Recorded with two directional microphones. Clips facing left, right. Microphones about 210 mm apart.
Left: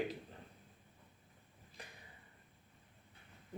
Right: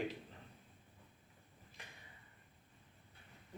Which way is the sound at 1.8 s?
35° left (ahead or behind).